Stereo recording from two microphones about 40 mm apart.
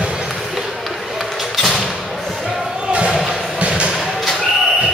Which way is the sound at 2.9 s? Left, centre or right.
Right.